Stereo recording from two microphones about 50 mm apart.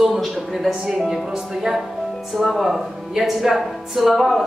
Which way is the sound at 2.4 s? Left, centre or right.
Centre.